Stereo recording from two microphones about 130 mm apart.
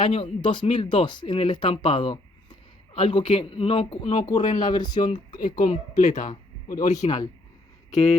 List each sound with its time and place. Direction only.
0.0 s speech: 40° left (ahead or behind)
5.4 s speech: 90° left
6.8 s speech: 70° left (ahead or behind)